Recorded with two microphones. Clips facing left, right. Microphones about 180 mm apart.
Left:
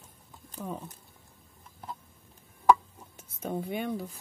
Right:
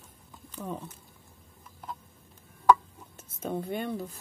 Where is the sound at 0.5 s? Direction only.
10° left (ahead or behind).